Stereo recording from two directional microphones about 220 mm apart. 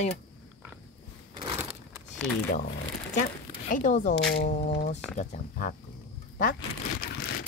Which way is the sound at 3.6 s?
35° left (ahead or behind).